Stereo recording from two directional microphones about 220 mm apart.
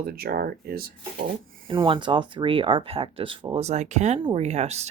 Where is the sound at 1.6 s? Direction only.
25° right (ahead or behind).